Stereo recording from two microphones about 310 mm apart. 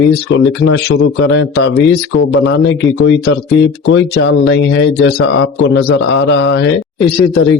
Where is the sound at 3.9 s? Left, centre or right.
Left.